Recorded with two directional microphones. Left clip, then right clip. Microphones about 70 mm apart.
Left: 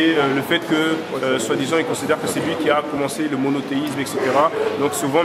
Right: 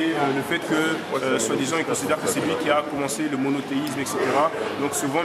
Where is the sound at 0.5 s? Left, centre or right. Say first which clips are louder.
Left 4 dB; centre.